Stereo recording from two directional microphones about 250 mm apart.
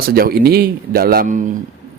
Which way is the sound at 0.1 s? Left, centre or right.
Right.